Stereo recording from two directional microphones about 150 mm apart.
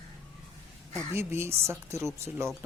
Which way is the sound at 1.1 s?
15° right (ahead or behind).